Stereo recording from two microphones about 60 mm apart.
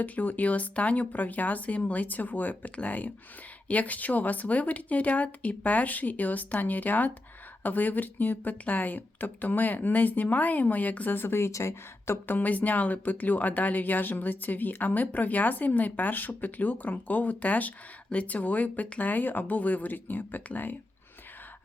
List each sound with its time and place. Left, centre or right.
0.0 s speech: left
12.3 s speech: left